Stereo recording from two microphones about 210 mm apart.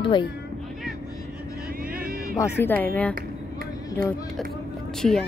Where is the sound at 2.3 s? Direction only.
10° left (ahead or behind).